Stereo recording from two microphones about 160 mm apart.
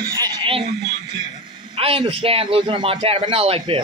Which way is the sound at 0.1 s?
30° right (ahead or behind).